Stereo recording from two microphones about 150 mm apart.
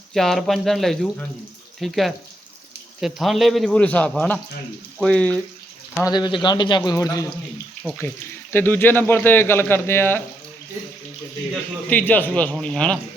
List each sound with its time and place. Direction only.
0.1 s a man's voice: centre (ahead or behind)
6.0 s a man's voice: 25° left (ahead or behind)
11.7 s a man's voice: 10° left (ahead or behind)